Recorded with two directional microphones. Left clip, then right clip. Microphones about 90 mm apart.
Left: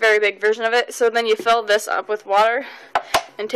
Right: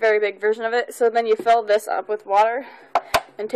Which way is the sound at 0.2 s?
15° right (ahead or behind).